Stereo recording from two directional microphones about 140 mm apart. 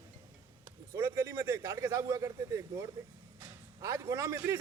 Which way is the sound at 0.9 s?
20° right (ahead or behind).